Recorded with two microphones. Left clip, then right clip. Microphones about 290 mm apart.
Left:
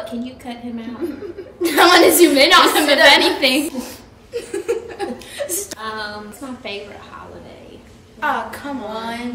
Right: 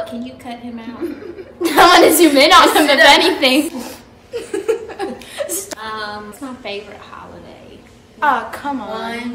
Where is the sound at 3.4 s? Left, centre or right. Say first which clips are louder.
Right 3 dB; centre.